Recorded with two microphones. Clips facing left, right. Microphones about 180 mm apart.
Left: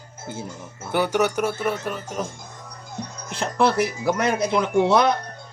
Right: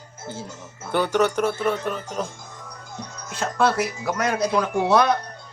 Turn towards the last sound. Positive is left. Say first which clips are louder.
# left 1 dB
turn(degrees=20)  # may be behind; listen again after turning